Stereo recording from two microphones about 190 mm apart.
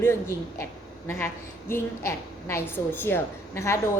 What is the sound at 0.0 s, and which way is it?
A woman's voice, 15° left (ahead or behind).